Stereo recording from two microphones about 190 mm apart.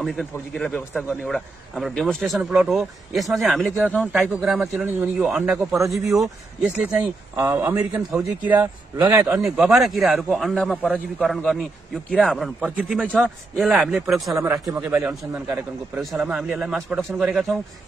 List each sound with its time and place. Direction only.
0.0 s a man's voice: centre (ahead or behind); by 9.3 s 15° right (ahead or behind)
9.3 s a man's voice: centre (ahead or behind)
14.7 s a man's voice: 10° right (ahead or behind)